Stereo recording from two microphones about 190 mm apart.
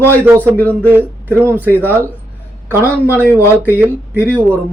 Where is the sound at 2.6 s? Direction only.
10° left (ahead or behind).